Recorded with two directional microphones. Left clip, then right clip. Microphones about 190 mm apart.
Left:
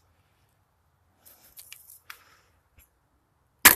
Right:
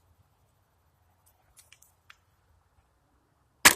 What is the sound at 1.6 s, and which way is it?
Biting, 60° left (ahead or behind).